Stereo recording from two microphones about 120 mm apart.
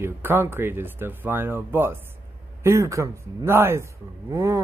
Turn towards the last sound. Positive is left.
turn(degrees=-25)  # may be behind; listen again after turning